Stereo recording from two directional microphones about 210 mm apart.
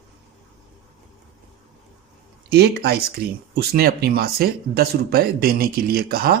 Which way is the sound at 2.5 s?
50° right (ahead or behind).